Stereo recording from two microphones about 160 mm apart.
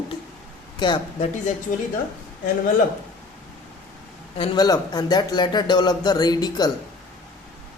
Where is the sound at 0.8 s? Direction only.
30° left (ahead or behind).